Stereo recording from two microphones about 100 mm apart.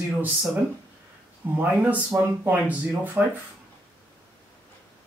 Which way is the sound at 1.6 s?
15° right (ahead or behind).